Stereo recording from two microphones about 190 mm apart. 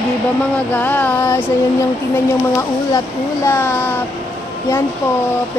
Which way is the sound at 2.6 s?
15° left (ahead or behind).